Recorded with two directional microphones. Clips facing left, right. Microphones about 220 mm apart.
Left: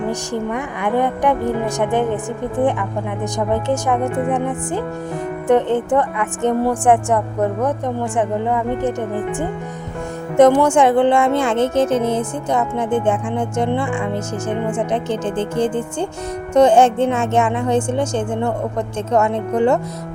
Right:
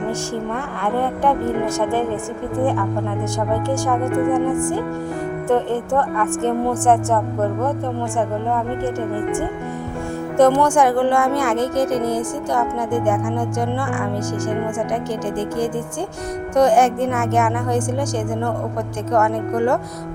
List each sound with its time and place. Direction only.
0.1 s a woman's voice: 15° left (ahead or behind)
1.8 s music: 20° left (ahead or behind)
3.5 s music: 20° left (ahead or behind)
5.5 s a woman's voice: 20° left (ahead or behind)
8.2 s a woman's voice: 20° left (ahead or behind)
10.3 s music: 20° left (ahead or behind)